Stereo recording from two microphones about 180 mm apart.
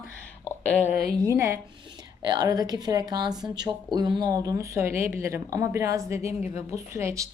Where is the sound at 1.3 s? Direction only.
15° right (ahead or behind).